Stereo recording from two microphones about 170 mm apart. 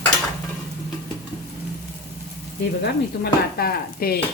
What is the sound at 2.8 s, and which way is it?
Stir, 65° left (ahead or behind).